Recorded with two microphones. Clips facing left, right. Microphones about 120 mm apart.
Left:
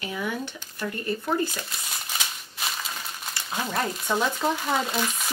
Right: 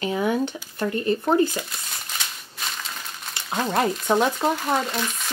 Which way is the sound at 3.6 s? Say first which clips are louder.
Right 7 dB; 30° right (ahead or behind).